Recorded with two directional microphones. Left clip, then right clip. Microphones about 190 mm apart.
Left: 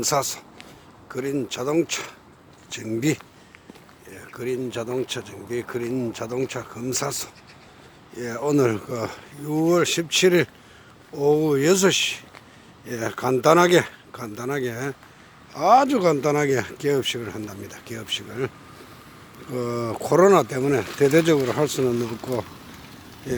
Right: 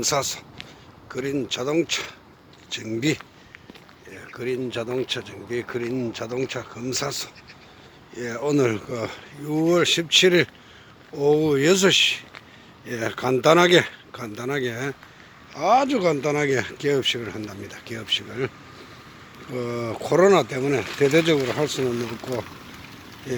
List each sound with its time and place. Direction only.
0.0 s speech: 15° left (ahead or behind)
4.2 s speech: 5° left (ahead or behind)
15.5 s speech: 25° left (ahead or behind); by 18.5 s 5° left (ahead or behind)
19.5 s speech: 20° left (ahead or behind)